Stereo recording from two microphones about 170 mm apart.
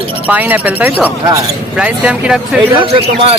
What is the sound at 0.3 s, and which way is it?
Speech, 10° right (ahead or behind).